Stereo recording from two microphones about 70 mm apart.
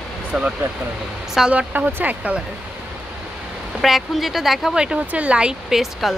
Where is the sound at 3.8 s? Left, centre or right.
Centre.